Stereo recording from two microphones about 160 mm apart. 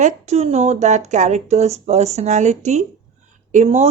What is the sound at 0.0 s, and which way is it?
A woman's voice, 45° right (ahead or behind).